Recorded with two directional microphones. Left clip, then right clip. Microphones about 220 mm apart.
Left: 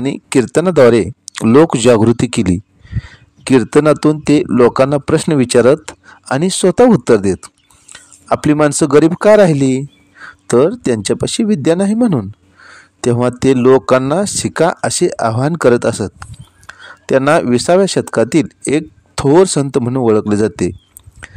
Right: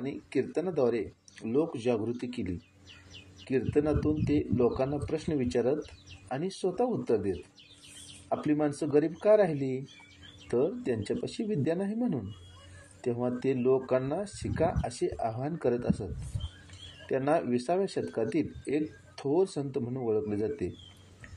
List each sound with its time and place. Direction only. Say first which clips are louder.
0.0 s speech: left 18 dB; 45° left (ahead or behind)